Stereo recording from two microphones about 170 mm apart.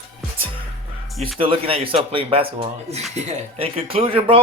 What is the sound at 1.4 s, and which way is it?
Speech, 30° right (ahead or behind).